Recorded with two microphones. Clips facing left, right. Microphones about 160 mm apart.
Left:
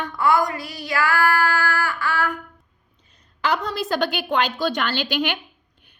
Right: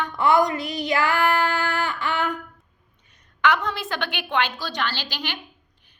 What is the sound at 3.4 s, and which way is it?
A woman's voice, 35° left (ahead or behind).